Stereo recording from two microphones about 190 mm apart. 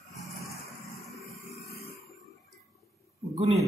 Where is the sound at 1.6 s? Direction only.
55° left (ahead or behind).